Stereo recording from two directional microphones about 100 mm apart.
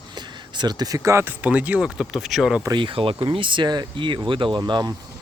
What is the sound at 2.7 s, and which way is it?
Speech, 60° right (ahead or behind).